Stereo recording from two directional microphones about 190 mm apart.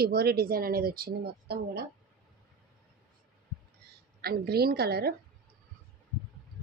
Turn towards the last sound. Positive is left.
turn(degrees=-55)  # may be behind; listen again after turning